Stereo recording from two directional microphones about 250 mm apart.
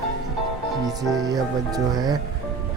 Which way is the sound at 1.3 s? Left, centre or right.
Centre.